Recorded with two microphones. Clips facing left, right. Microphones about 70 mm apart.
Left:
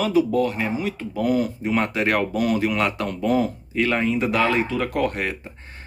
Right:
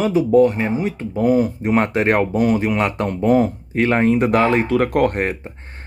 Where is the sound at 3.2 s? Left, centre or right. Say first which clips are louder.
Right 6 dB; right.